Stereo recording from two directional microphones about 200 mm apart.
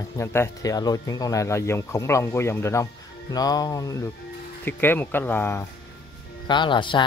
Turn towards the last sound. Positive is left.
turn(degrees=25)  # may be behind; listen again after turning